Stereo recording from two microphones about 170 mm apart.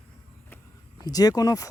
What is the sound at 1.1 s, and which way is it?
Speech, 20° left (ahead or behind).